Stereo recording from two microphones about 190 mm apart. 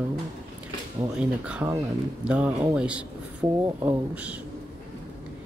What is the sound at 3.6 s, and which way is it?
Speech, 15° right (ahead or behind).